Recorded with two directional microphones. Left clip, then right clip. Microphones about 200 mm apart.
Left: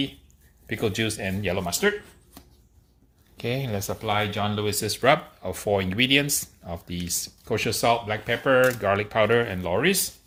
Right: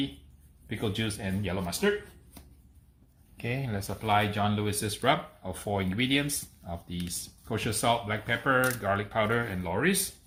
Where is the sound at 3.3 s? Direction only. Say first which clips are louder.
Left 6 dB; 30° left (ahead or behind).